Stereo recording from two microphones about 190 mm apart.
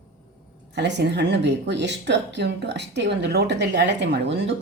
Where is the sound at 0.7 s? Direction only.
65° right (ahead or behind).